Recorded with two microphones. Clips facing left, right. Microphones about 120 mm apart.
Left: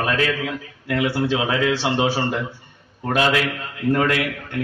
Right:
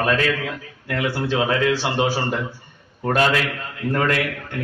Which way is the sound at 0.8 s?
15° left (ahead or behind).